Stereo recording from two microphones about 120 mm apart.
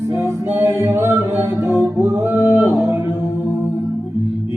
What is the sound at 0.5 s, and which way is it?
Music, 20° right (ahead or behind).